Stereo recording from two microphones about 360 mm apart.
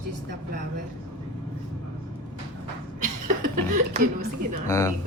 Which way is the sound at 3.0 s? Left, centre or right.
Right.